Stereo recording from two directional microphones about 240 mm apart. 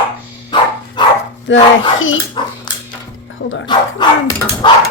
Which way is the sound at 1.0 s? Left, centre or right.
Centre.